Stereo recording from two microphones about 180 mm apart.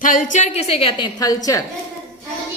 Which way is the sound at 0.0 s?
45° left (ahead or behind).